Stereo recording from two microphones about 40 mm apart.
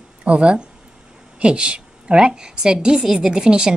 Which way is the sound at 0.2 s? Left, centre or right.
Right.